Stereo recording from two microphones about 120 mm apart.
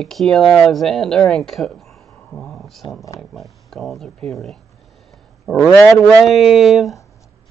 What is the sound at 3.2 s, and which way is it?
Speech, centre (ahead or behind).